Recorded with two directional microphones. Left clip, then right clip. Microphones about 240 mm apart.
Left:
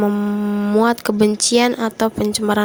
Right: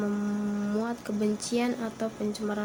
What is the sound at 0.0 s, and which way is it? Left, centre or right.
Speech, left.